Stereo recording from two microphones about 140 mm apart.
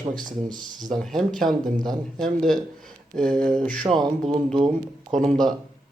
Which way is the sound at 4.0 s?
30° right (ahead or behind).